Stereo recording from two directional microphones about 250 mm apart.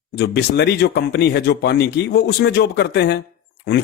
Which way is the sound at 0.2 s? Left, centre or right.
Left.